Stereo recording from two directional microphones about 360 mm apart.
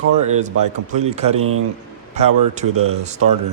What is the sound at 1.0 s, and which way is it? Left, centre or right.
Speech, centre.